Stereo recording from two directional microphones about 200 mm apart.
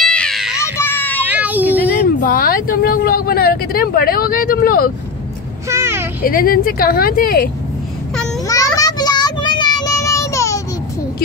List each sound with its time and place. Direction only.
0.0 s a sound: 5° left (ahead or behind)
0.7 s children playing: 10° left (ahead or behind)
1.2 s child singing: 10° right (ahead or behind)
2.0 s vehicle: 45° left (ahead or behind)
5.7 s vehicle: 15° right (ahead or behind)
6.2 s speech: 45° left (ahead or behind)
8.5 s child singing: 15° left (ahead or behind)